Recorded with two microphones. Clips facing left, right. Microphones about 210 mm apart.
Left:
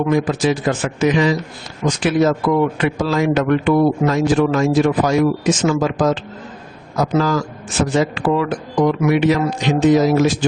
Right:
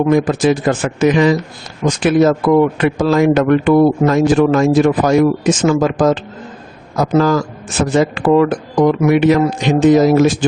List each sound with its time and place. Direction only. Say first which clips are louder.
0.1 s speech: right 4 dB; 50° right (ahead or behind)